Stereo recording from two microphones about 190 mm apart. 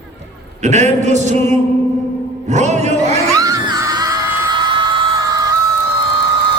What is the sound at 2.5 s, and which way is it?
Music, 40° right (ahead or behind).